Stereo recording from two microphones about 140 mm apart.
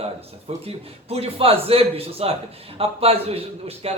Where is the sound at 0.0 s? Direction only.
45° right (ahead or behind).